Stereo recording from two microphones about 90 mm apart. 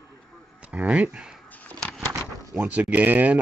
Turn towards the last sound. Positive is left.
turn(degrees=-20)  # may be behind; listen again after turning